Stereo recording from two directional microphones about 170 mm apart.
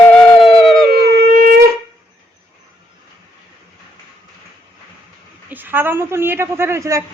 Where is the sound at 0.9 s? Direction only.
70° right (ahead or behind).